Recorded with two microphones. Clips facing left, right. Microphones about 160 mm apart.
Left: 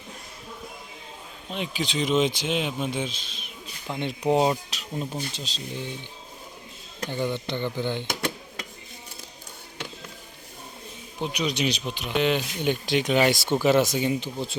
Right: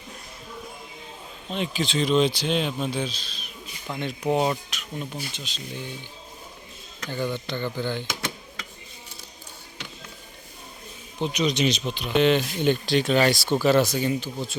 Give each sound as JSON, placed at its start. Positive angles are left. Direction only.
{"t": 1.5, "sound": "speech", "side_deg": 10}
{"t": 4.7, "sound": "speech", "side_deg": 35}
{"t": 7.0, "sound": "speech", "side_deg": 25}
{"t": 11.2, "sound": "speech", "side_deg": 10}